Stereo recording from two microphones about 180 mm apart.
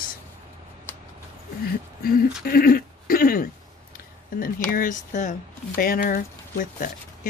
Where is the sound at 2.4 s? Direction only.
55° left (ahead or behind).